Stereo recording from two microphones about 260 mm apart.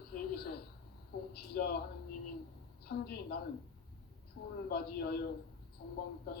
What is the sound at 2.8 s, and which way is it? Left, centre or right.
Speech, left.